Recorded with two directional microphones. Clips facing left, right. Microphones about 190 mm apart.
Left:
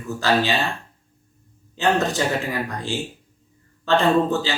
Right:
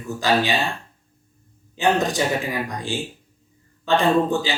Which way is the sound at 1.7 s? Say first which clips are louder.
Even; 15° right (ahead or behind).